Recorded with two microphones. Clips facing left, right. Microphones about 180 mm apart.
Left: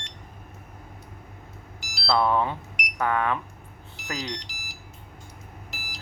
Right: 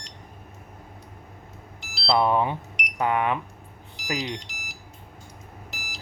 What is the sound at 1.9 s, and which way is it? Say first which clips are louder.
Speech: right 1 dB; 20° right (ahead or behind).